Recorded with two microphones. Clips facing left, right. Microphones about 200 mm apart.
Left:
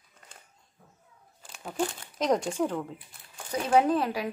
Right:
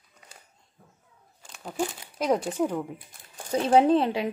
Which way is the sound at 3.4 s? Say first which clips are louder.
Right 4 dB; 30° right (ahead or behind).